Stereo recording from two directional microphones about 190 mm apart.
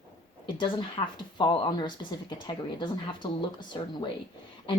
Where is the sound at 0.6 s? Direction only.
25° left (ahead or behind).